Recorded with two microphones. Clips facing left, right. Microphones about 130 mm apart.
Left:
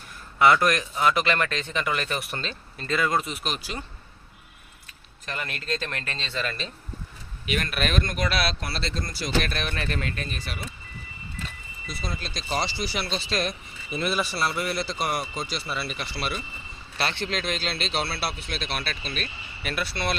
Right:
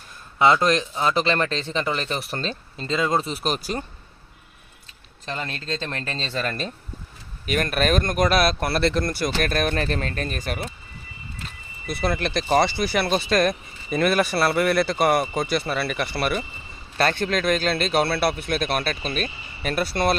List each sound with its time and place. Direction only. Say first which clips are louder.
0.3 s speech: right 2 dB; 20° right (ahead or behind)
2.8 s speech: right 2 dB; 20° right (ahead or behind); by 3.8 s 40° right (ahead or behind)
5.2 s speech: right 3 dB; 25° right (ahead or behind); by 10.7 s 50° right (ahead or behind)
11.9 s speech: right 10 dB; 65° right (ahead or behind); by 20.1 s 40° right (ahead or behind)